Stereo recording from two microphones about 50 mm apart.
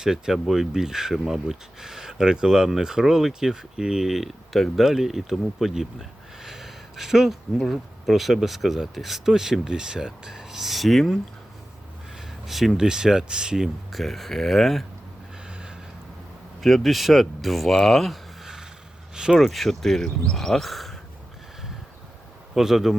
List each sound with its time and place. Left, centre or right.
0.0 s speech: centre
12.5 s speech: centre
13.9 s speech: centre
15.4 s a sound: centre
16.6 s speech: centre
19.1 s speech: centre
19.4 s speech: centre
22.5 s speech: centre